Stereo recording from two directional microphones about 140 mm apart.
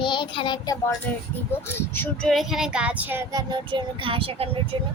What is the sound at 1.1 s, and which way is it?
Speech, 10° left (ahead or behind).